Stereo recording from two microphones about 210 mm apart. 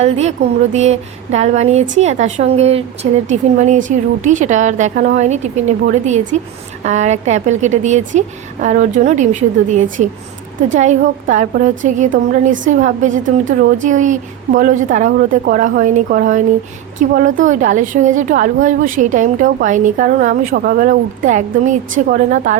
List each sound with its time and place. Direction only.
0.0 s speech: 30° right (ahead or behind)